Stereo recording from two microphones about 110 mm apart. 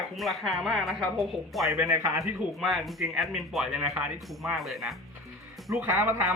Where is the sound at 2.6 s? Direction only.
Centre (ahead or behind).